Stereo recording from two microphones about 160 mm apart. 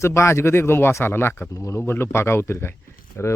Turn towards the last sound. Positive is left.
turn(degrees=15)  # may be behind; listen again after turning